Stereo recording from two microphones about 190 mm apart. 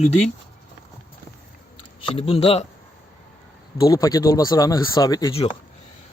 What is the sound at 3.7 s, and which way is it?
Speech, 20° left (ahead or behind).